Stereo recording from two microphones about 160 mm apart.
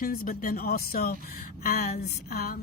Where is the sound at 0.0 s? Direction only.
60° left (ahead or behind).